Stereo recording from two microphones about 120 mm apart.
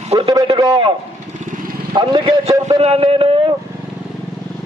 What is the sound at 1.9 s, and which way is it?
Speech, 40° right (ahead or behind).